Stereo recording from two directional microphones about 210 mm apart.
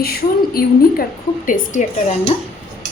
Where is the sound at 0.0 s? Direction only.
45° left (ahead or behind).